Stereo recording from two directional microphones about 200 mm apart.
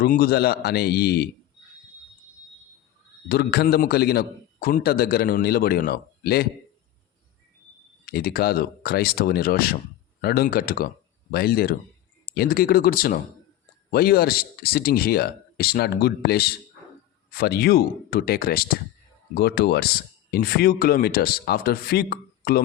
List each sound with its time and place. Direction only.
0.0 s a man's voice: 50° left (ahead or behind)
3.2 s a man's voice: 50° left (ahead or behind)
8.0 s a man's voice: 50° left (ahead or behind)